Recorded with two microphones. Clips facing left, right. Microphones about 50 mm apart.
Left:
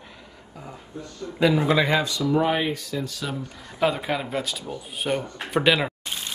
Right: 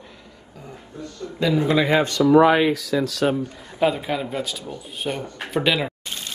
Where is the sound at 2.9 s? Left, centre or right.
Right.